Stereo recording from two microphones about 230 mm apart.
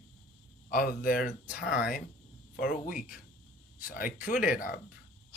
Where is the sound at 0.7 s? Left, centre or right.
Left.